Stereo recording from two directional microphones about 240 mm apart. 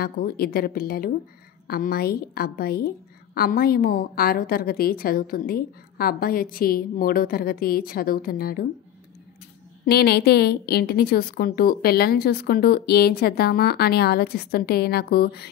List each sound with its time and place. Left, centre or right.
0.0 s a woman's voice: left
9.8 s a woman's voice: left